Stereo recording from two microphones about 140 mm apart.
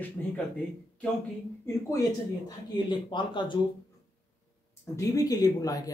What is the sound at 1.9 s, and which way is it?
Speech, 30° left (ahead or behind).